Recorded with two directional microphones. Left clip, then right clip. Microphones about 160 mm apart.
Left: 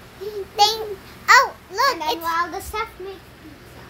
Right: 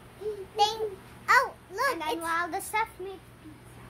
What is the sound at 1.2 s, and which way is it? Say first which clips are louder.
Babbling: left 9 dB; 5° right (ahead or behind).